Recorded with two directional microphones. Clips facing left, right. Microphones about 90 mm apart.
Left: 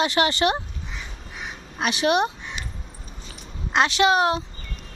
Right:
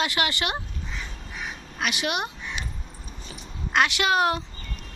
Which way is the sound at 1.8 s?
30° left (ahead or behind).